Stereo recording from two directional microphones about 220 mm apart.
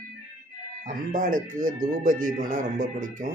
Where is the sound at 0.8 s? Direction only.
35° right (ahead or behind).